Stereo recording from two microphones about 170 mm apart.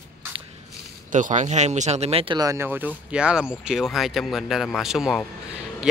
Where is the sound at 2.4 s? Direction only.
15° right (ahead or behind).